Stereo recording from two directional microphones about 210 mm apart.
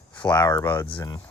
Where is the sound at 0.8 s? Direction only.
20° left (ahead or behind).